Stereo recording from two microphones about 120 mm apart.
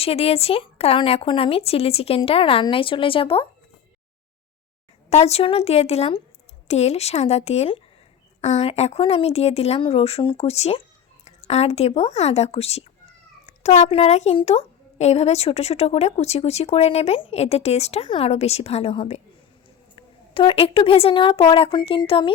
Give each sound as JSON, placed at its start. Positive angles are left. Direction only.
{"t": 0.0, "sound": "speech", "side_deg": 55}
{"t": 5.0, "sound": "a woman's voice", "side_deg": 60}
{"t": 20.0, "sound": "speech", "side_deg": 45}